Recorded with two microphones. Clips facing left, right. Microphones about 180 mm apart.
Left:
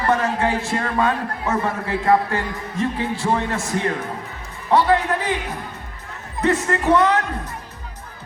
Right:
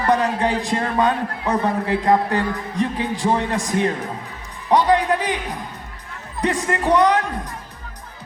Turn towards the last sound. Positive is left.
turn(degrees=-15)  # may be behind; listen again after turning